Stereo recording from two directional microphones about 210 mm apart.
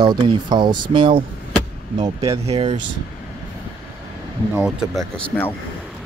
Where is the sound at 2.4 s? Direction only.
30° right (ahead or behind).